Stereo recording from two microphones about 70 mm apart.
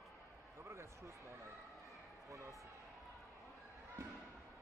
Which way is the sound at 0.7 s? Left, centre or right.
Right.